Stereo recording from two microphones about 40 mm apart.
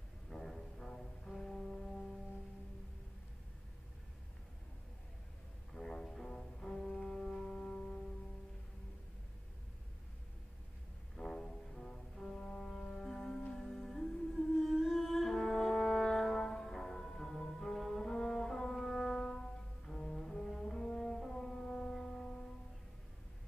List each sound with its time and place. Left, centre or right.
0.3 s music: centre
5.8 s music: centre
7.6 s music: left
11.1 s music: centre
13.0 s music: centre
20.7 s brass instrument: centre
21.2 s music: centre